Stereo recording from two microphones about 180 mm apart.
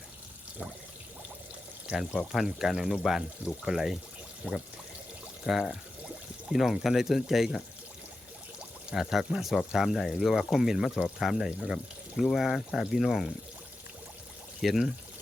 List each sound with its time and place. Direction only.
1.9 s speech: centre (ahead or behind)
8.9 s speech: centre (ahead or behind)
14.6 s speech: centre (ahead or behind)